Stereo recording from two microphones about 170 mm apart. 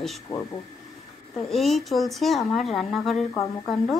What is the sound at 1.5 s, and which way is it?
A woman's voice, centre (ahead or behind).